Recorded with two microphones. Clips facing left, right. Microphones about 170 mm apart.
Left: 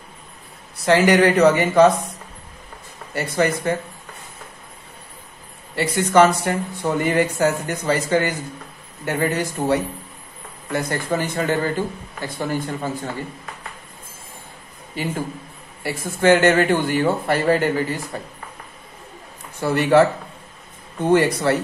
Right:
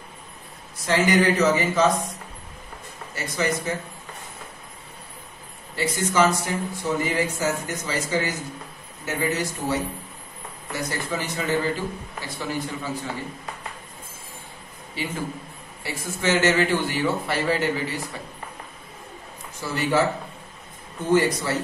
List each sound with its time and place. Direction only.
0.8 s speech: 70° left (ahead or behind)
3.2 s speech: 60° left (ahead or behind)
5.8 s a man's voice: 65° left (ahead or behind)
15.0 s a man's voice: 50° left (ahead or behind)
19.6 s speech: 60° left (ahead or behind)
21.1 s speech: 60° left (ahead or behind)